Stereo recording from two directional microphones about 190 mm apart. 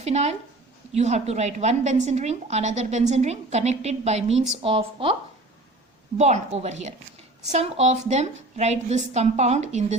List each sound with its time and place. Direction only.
0.0 s a woman's voice: 35° right (ahead or behind)
6.1 s a woman's voice: 35° right (ahead or behind)